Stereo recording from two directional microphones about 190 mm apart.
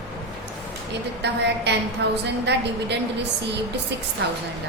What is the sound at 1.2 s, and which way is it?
A woman's voice, 65° right (ahead or behind).